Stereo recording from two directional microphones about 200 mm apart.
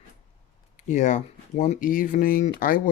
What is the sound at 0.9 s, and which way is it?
Speech, 40° left (ahead or behind).